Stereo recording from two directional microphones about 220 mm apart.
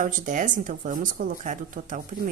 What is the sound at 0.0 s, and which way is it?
A woman's voice, 35° right (ahead or behind).